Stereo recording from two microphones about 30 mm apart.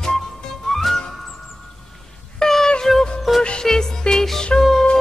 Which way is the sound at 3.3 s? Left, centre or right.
Centre.